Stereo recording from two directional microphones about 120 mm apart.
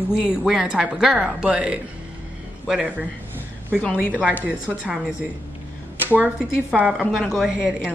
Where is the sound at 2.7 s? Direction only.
5° right (ahead or behind).